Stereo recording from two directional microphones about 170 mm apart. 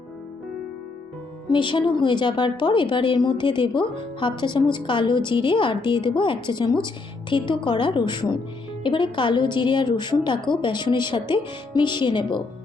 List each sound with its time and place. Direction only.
1.5 s a woman's voice: 30° left (ahead or behind)